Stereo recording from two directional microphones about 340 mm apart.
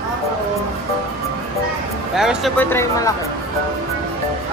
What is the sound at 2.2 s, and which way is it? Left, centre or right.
Speech, centre.